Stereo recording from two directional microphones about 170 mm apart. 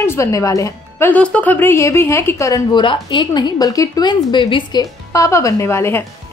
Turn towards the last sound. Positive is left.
turn(degrees=15)  # may be behind; listen again after turning